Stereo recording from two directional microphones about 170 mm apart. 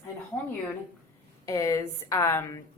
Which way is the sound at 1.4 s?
20° left (ahead or behind).